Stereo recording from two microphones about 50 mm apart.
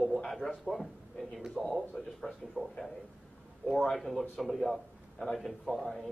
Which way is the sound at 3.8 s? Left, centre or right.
Centre.